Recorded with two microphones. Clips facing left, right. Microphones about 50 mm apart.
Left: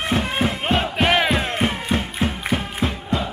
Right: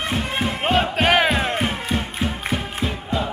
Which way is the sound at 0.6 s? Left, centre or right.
Centre.